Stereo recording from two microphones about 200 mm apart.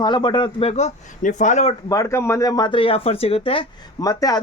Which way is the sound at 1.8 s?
15° left (ahead or behind).